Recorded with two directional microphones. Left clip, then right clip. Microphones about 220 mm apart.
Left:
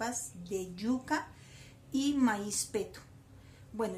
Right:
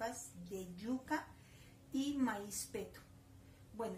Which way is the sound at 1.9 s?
30° left (ahead or behind).